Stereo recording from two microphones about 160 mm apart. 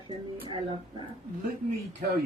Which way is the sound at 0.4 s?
30° right (ahead or behind).